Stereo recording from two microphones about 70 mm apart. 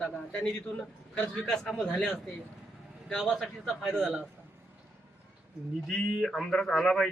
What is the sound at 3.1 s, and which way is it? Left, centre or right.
Speech, centre.